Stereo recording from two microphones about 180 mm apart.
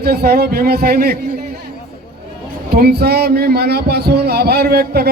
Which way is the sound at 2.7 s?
60° right (ahead or behind).